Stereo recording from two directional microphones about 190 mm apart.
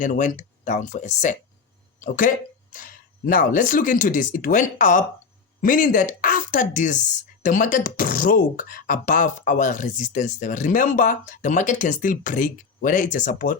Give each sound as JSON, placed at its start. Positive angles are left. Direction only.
{"t": 0.0, "sound": "speech", "side_deg": 45}